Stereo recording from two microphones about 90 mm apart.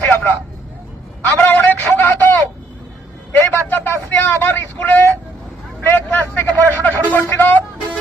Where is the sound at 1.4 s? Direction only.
20° left (ahead or behind).